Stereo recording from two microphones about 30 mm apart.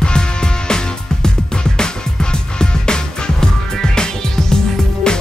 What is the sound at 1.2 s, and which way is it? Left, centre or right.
Music, left.